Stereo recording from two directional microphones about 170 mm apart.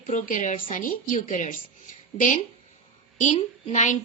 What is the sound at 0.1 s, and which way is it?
A woman's voice, 50° left (ahead or behind).